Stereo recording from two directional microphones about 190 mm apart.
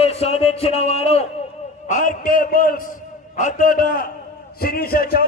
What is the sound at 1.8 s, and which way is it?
A man's voice, 45° left (ahead or behind).